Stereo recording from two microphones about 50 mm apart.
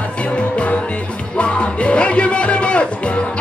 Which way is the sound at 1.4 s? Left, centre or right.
Left.